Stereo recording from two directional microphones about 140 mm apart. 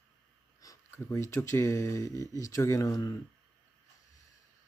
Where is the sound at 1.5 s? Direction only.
20° left (ahead or behind).